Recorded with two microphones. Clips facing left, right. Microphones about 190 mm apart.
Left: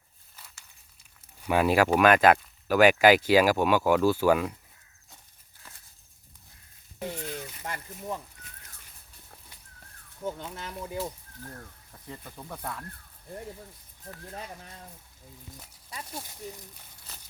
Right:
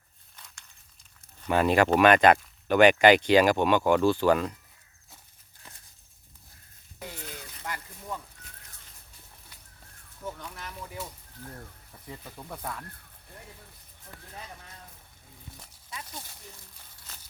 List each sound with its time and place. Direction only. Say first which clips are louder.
0.3 s walk: even; 5° left (ahead or behind)
1.4 s speech: even; 10° left (ahead or behind)
7.6 s speech: left 2 dB; 25° left (ahead or behind)
10.2 s speech: left 4 dB; 25° left (ahead or behind)
12.0 s speech: even; 5° right (ahead or behind)